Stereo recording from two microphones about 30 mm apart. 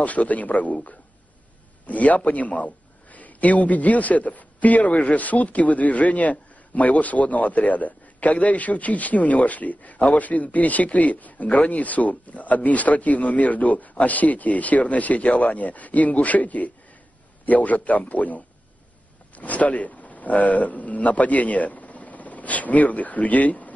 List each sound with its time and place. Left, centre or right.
0.0 s a man's voice: left
1.9 s a man's voice: left